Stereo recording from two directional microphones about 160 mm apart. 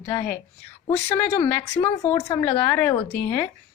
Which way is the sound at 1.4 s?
15° left (ahead or behind).